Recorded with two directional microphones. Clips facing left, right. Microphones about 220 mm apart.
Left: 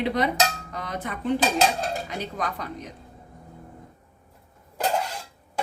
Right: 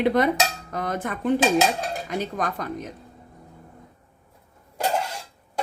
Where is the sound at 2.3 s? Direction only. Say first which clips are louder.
Right 3 dB; 45° right (ahead or behind).